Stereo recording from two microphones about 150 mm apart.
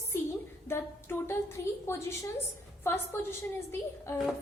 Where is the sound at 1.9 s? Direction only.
20° left (ahead or behind).